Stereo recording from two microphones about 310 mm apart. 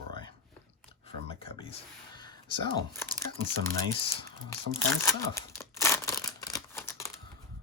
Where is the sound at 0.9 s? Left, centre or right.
Centre.